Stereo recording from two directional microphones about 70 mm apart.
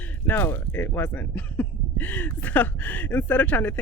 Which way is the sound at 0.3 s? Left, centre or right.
Left.